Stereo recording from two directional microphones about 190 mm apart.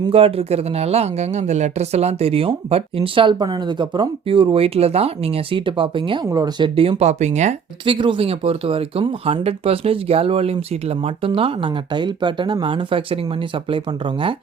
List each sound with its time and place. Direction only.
0.0 s speech: 30° right (ahead or behind)
7.9 s speech: 25° right (ahead or behind)